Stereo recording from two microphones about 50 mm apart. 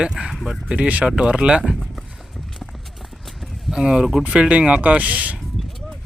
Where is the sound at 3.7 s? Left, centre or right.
Centre.